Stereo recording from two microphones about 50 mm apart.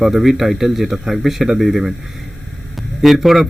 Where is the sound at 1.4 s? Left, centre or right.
Centre.